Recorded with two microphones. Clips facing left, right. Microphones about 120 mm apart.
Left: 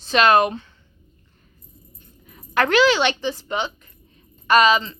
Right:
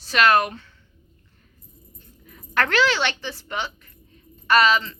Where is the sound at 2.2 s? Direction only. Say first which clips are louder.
Left 3 dB; 20° left (ahead or behind).